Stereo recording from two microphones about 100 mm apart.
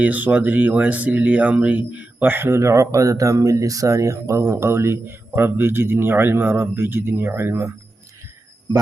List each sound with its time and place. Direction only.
0.0 s speech: 15° right (ahead or behind)